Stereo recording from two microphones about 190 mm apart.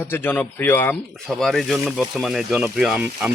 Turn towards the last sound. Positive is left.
turn(degrees=-5)  # may be behind; listen again after turning